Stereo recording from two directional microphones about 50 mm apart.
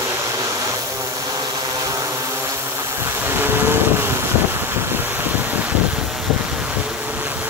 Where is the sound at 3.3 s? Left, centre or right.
Right.